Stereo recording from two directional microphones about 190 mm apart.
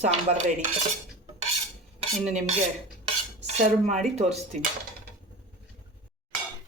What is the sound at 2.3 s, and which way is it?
Speech, 35° right (ahead or behind).